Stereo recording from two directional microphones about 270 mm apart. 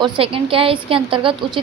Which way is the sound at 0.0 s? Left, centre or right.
Centre.